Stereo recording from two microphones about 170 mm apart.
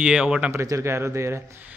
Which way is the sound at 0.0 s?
5° right (ahead or behind).